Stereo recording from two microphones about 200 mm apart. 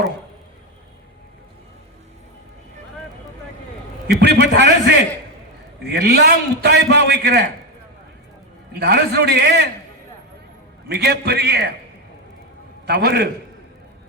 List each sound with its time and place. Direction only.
4.1 s a man's voice: 55° right (ahead or behind)
5.9 s a man's voice: 55° right (ahead or behind)
8.8 s a man's voice: 55° right (ahead or behind)
10.8 s a man's voice: 55° right (ahead or behind)
12.8 s a man's voice: 55° right (ahead or behind)